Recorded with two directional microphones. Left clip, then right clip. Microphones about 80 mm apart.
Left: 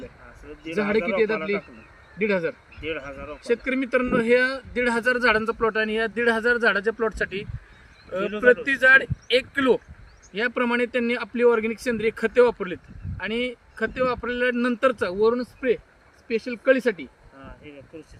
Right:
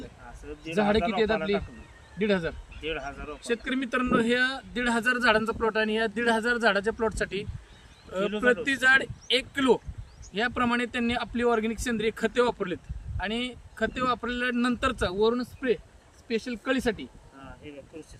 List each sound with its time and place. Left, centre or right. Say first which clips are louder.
0.4 s speech: even; right